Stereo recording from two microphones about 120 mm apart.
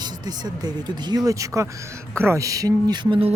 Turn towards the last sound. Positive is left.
turn(degrees=-50)  # may be behind; listen again after turning